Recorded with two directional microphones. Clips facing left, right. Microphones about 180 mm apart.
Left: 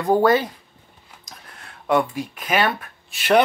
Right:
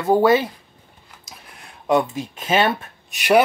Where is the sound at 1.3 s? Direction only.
10° right (ahead or behind).